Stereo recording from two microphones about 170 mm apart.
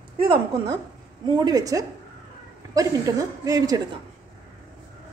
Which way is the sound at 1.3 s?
25° right (ahead or behind).